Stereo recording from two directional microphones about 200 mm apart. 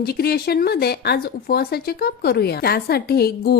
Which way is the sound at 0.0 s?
50° left (ahead or behind).